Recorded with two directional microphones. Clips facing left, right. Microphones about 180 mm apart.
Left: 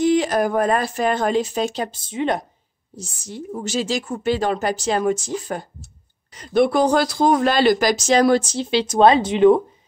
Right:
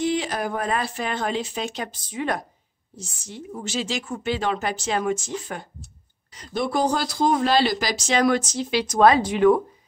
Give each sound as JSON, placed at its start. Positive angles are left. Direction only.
{"t": 0.0, "sound": "speech", "side_deg": 45}
{"t": 3.0, "sound": "speech", "side_deg": 40}
{"t": 6.3, "sound": "speech", "side_deg": 55}